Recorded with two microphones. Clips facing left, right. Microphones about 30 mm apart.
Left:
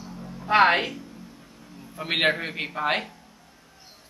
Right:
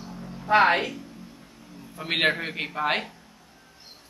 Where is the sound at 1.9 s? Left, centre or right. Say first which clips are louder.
Left 1 dB; centre.